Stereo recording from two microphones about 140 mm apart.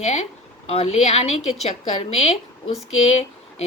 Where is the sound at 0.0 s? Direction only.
50° left (ahead or behind).